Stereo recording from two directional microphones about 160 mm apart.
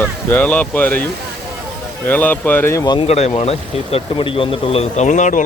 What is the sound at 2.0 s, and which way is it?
Speech, 10° left (ahead or behind).